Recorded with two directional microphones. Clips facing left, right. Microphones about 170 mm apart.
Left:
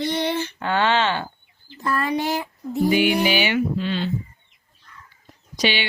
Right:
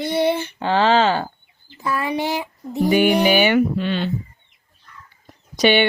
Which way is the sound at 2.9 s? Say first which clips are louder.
Right 6 dB; 55° right (ahead or behind).